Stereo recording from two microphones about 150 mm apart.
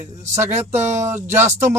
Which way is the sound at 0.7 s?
50° right (ahead or behind).